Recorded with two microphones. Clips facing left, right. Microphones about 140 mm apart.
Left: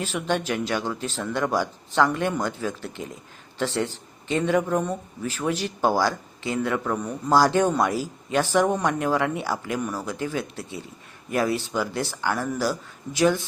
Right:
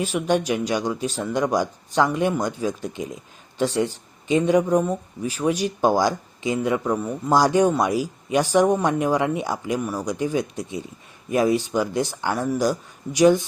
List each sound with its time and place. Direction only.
0.0 s speech: 15° right (ahead or behind)